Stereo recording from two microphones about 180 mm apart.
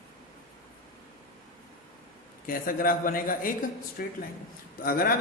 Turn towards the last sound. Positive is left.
turn(degrees=55)  # may be behind; listen again after turning